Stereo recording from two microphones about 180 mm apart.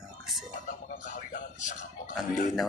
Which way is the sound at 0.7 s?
45° left (ahead or behind).